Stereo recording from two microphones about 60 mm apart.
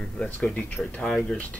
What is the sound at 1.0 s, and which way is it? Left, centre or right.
Speech, centre.